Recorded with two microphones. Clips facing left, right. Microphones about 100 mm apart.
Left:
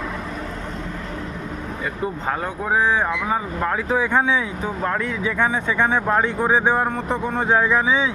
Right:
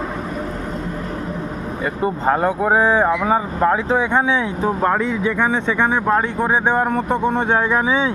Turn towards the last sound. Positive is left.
turn(degrees=-20)  # may be behind; listen again after turning